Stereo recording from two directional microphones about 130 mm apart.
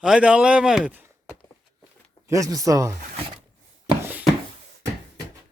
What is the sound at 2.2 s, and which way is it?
Speech, 25° right (ahead or behind).